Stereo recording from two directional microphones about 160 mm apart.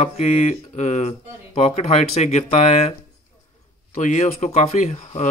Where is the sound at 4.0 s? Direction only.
50° left (ahead or behind).